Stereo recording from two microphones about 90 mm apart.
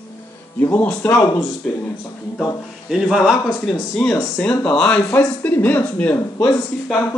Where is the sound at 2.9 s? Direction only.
5° right (ahead or behind).